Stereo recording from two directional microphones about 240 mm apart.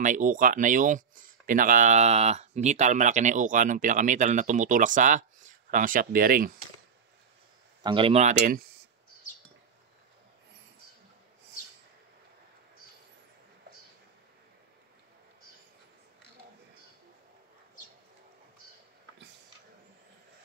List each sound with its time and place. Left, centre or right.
0.0 s speech: right
7.8 s speech: right